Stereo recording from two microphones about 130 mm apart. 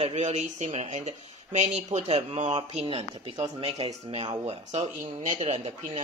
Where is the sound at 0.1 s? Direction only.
60° right (ahead or behind).